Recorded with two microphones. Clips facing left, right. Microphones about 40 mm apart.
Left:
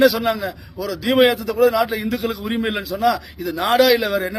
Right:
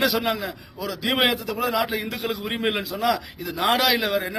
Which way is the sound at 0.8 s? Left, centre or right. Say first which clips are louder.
Left 7 dB; right.